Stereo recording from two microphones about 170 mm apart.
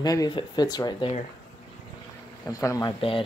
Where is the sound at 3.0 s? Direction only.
30° left (ahead or behind).